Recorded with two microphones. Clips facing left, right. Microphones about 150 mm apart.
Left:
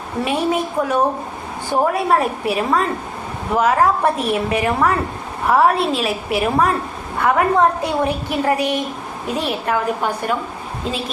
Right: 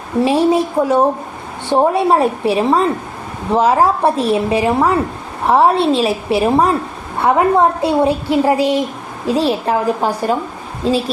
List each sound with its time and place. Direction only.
0.3 s a woman's voice: 30° right (ahead or behind)